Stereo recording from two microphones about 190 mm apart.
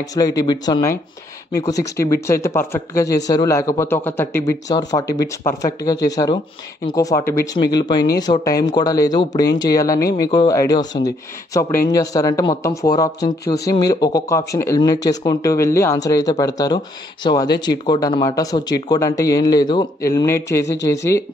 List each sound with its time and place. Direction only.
0.1 s a man's voice: 20° left (ahead or behind)